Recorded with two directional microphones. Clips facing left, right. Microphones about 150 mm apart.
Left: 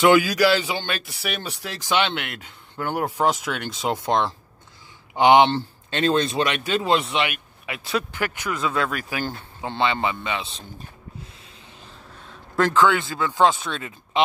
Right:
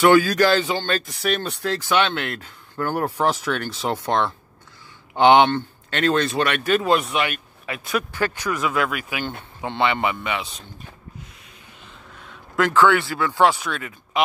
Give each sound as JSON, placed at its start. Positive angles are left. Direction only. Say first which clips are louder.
{"t": 0.0, "sound": "a man's voice", "louder": "right 1 dB", "side_deg": 15}
{"t": 7.8, "sound": "speech", "louder": "right 2 dB", "side_deg": 25}
{"t": 9.7, "sound": "speech", "louder": "right 1 dB", "side_deg": 30}
{"t": 12.2, "sound": "a sound", "louder": "even", "side_deg": 35}
{"t": 12.7, "sound": "speech", "louder": "right 4 dB", "side_deg": 15}